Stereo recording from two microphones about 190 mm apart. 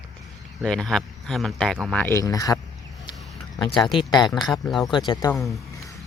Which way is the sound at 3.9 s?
20° left (ahead or behind).